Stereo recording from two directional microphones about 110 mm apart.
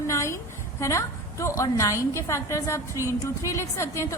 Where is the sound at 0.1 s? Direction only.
25° left (ahead or behind).